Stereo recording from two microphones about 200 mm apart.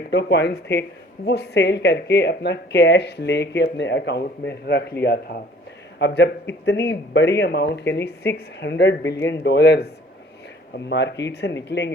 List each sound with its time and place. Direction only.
0.1 s speech: 55° left (ahead or behind)
6.0 s speech: 60° left (ahead or behind)
10.8 s speech: 60° left (ahead or behind)